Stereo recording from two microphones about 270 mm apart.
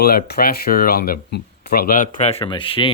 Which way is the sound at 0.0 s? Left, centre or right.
Left.